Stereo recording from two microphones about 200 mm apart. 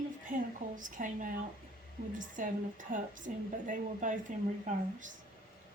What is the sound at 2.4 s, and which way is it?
Speech, 40° right (ahead or behind).